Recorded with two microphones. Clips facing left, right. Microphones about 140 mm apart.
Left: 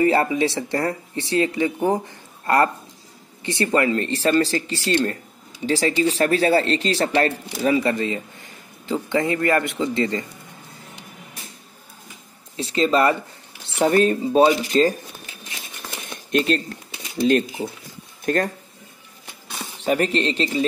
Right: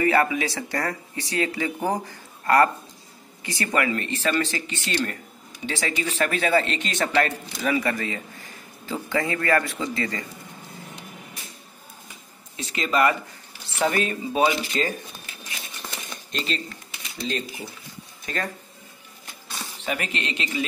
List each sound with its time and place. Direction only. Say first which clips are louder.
0.0 s a man's voice: left 3 dB; 25° left (ahead or behind)
12.5 s speech: left 5 dB; 30° left (ahead or behind)
16.3 s speech: left 10 dB; 55° left (ahead or behind)
18.2 s speech: left 9 dB; 45° left (ahead or behind)
19.8 s speech: left 9 dB; 35° left (ahead or behind)